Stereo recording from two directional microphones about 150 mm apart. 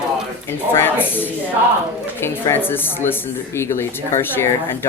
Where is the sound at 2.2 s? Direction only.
15° left (ahead or behind).